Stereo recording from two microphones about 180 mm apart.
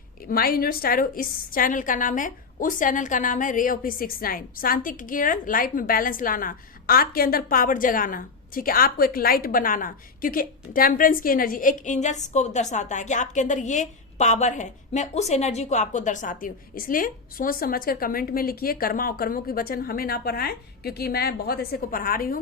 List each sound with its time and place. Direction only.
0.3 s a woman's voice: 55° left (ahead or behind)